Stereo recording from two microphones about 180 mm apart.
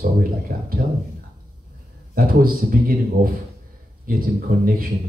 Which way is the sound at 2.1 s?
55° right (ahead or behind).